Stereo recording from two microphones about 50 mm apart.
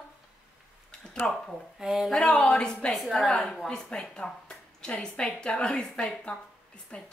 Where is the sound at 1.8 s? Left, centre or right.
Centre.